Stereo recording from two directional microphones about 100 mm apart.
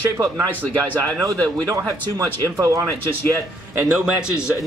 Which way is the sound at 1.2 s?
35° right (ahead or behind).